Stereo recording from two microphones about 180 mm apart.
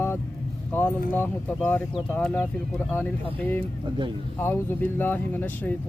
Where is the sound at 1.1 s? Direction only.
10° left (ahead or behind).